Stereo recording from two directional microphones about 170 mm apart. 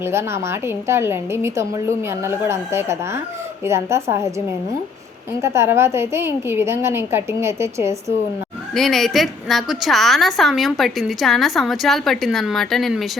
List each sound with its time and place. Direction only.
0.0 s a woman's voice: 15° right (ahead or behind)
5.4 s a woman's voice: 15° right (ahead or behind)
8.7 s a woman's voice: centre (ahead or behind)